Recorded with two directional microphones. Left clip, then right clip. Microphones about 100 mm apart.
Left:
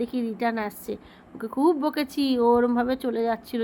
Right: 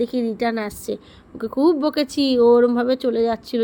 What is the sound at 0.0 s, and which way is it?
A woman's voice, 50° right (ahead or behind).